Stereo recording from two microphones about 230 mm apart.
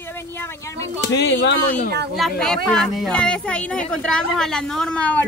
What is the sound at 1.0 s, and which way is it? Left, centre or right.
Speech, left.